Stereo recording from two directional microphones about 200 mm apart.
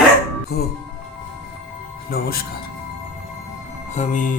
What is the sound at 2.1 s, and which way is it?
Speech, 50° left (ahead or behind).